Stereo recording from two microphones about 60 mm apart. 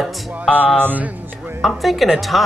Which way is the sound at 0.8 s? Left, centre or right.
Right.